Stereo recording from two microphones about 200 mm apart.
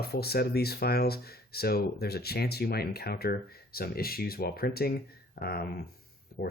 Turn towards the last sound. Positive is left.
turn(degrees=45)  # may be behind; listen again after turning